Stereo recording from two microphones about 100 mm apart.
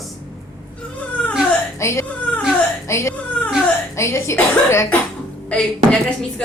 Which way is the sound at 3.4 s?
10° left (ahead or behind).